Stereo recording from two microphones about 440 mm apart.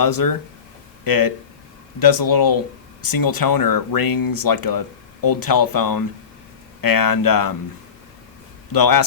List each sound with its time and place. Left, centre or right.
0.0 s speech: left
8.7 s speech: left